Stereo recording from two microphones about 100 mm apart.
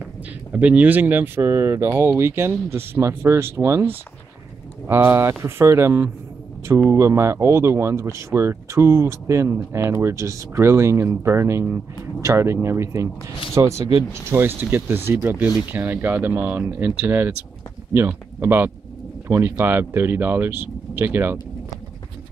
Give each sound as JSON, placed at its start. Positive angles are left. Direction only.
{"t": 0.5, "sound": "speech", "side_deg": -15}